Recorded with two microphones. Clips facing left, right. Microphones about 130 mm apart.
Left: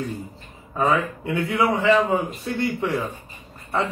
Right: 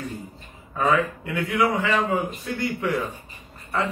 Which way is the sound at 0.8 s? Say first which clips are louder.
Even; 25° left (ahead or behind).